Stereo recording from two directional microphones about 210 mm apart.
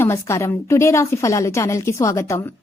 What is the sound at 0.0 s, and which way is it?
A woman's voice, 15° left (ahead or behind).